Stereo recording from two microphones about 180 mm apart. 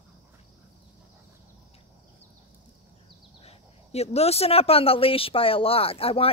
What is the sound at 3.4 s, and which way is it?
Speech, 35° left (ahead or behind).